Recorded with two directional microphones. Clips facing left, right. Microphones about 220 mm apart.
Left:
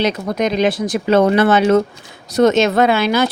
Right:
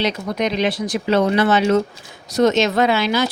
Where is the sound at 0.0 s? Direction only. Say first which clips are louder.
Left 3 dB; 45° left (ahead or behind).